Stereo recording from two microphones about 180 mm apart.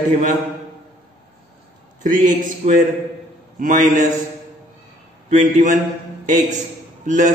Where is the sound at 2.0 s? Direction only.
45° right (ahead or behind).